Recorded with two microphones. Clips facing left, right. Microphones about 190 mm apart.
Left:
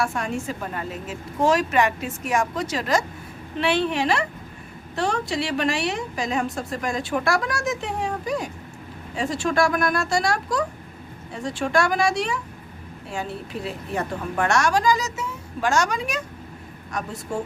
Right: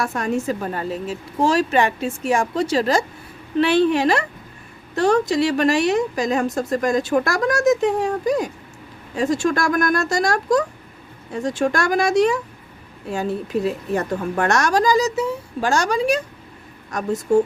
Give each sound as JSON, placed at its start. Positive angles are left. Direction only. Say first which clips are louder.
{"t": 0.0, "sound": "a woman's voice", "louder": "right 4 dB", "side_deg": -40}